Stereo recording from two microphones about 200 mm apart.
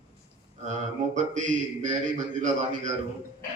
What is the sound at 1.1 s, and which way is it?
Mantra, 40° right (ahead or behind).